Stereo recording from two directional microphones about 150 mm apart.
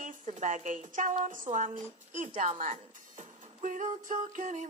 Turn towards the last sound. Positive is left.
turn(degrees=-55)  # may be behind; listen again after turning